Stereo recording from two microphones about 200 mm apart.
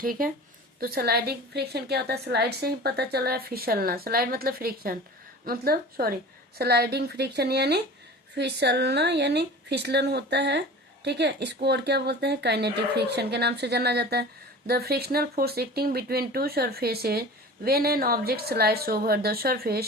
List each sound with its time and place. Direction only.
0.0 s speech: 45° right (ahead or behind)